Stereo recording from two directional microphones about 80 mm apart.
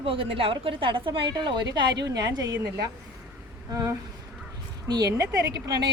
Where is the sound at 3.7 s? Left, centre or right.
Right.